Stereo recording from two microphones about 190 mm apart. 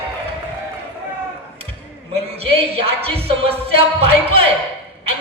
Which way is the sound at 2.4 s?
30° right (ahead or behind).